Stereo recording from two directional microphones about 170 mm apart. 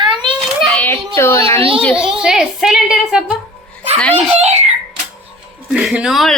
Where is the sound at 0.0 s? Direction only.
30° right (ahead or behind).